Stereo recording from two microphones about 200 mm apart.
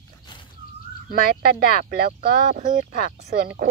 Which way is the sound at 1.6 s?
50° right (ahead or behind).